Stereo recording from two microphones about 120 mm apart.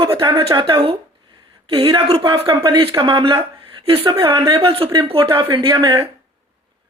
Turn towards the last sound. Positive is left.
turn(degrees=-45)  # may be behind; listen again after turning